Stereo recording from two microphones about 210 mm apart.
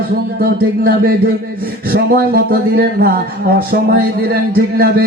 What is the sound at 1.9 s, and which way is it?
Speech, 45° right (ahead or behind).